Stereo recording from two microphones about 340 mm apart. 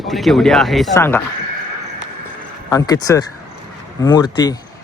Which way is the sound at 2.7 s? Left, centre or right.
Centre.